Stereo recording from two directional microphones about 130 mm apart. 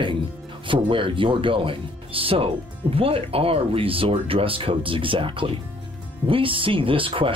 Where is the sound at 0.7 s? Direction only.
40° right (ahead or behind).